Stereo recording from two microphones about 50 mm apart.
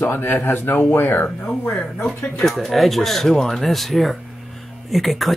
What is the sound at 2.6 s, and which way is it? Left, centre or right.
Speech, centre.